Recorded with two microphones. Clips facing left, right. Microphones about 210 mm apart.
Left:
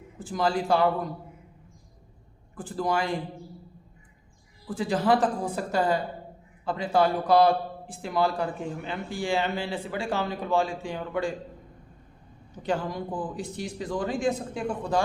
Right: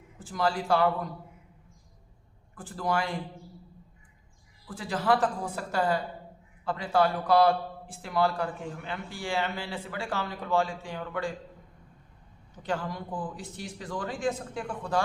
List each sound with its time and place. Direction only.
0.2 s a man's voice: 15° left (ahead or behind)
2.7 s a man's voice: 15° left (ahead or behind)
4.7 s a man's voice: 15° left (ahead or behind)
12.6 s a man's voice: 15° left (ahead or behind)